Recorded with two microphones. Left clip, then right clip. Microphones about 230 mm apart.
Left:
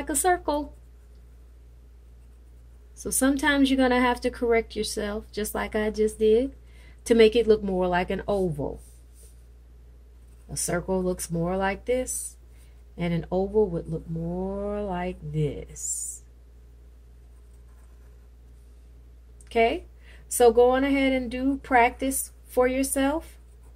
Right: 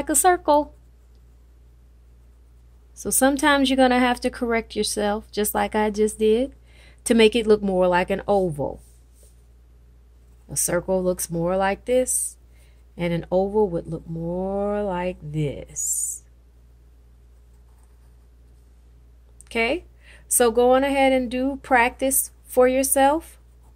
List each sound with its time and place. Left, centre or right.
0.0 s speech: right
2.9 s speech: right
10.5 s speech: right
19.4 s a woman's voice: right